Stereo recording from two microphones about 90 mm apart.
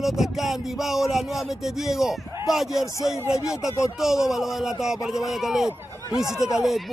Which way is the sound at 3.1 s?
35° left (ahead or behind).